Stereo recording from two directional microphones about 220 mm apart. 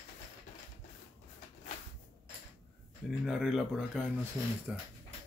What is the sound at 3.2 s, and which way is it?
A man's voice, centre (ahead or behind).